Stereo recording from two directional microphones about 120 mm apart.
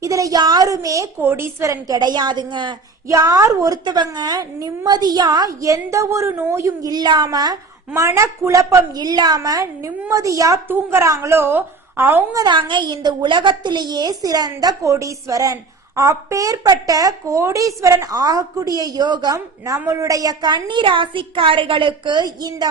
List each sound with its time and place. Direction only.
0.0 s a woman's voice: 25° right (ahead or behind)
3.1 s a woman's voice: 30° right (ahead or behind)
6.7 s a woman's voice: 35° right (ahead or behind)
9.0 s a woman's voice: 35° right (ahead or behind); by 12.2 s 15° right (ahead or behind)
12.3 s a woman's voice: 35° right (ahead or behind)